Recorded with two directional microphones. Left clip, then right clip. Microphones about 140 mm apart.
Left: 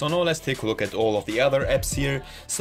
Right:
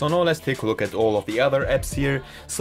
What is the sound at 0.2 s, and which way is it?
Speech, 35° right (ahead or behind).